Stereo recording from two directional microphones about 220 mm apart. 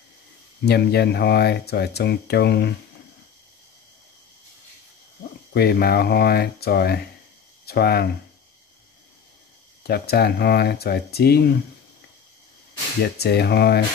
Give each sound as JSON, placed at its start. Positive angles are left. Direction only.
{"t": 0.7, "sound": "speech", "side_deg": 45}
{"t": 5.5, "sound": "speech", "side_deg": 45}
{"t": 9.8, "sound": "speech", "side_deg": 45}
{"t": 13.0, "sound": "speech", "side_deg": 45}